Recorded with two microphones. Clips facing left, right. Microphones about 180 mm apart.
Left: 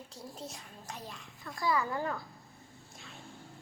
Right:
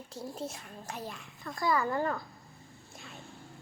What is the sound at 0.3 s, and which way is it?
Speech, 5° right (ahead or behind).